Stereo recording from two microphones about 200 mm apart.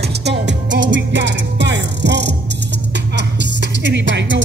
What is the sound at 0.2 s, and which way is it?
Music, 60° right (ahead or behind).